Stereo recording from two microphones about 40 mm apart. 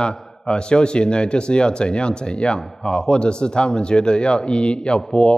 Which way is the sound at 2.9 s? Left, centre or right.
Left.